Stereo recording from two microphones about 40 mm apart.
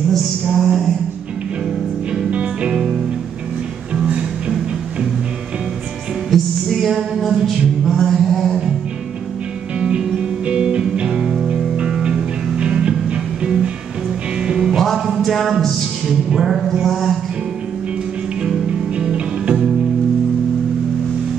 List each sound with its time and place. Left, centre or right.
0.5 s a sound: centre
2.7 s music: centre
6.3 s music: centre
9.8 s music: right
12.5 s music: right
15.0 s a sound: centre
15.2 s music: centre
18.7 s music: right